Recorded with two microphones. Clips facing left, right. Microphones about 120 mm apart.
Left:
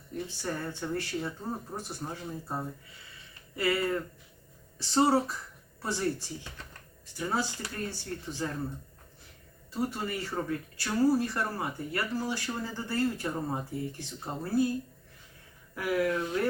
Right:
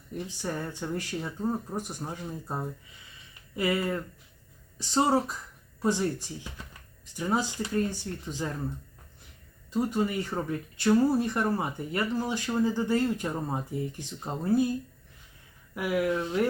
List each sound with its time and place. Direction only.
0.3 s speech: 15° right (ahead or behind)
9.7 s speech: 15° right (ahead or behind)
15.7 s speech: 15° right (ahead or behind)